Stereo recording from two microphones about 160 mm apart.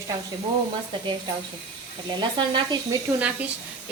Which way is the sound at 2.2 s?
30° right (ahead or behind).